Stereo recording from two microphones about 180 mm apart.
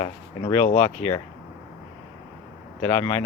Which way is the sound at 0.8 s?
15° left (ahead or behind).